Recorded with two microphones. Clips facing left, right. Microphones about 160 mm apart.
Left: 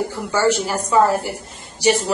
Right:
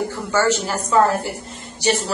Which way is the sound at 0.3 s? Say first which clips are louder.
Left 1 dB; 15° left (ahead or behind).